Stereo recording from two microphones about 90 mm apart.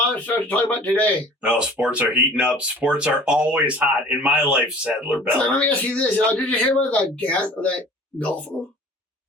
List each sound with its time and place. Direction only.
0.1 s speech: 15° left (ahead or behind)
1.4 s speech: 10° right (ahead or behind)
5.4 s speech: 15° left (ahead or behind)